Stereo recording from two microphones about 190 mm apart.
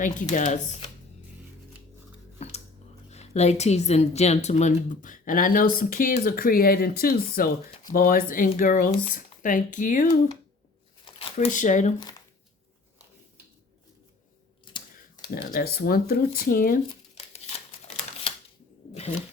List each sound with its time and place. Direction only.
0.0 s speech: 40° left (ahead or behind)
3.1 s a woman's voice: 35° left (ahead or behind)
11.0 s a sound: 30° left (ahead or behind)
11.5 s speech: 40° left (ahead or behind)
14.6 s scissors: 25° left (ahead or behind)
15.4 s a woman's voice: 50° left (ahead or behind)
17.3 s scissors: 35° left (ahead or behind)